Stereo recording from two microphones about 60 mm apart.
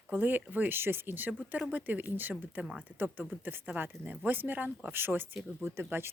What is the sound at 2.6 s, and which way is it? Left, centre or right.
Speech, centre.